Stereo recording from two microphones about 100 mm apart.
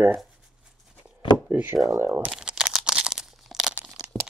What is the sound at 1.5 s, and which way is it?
Speech, 20° right (ahead or behind).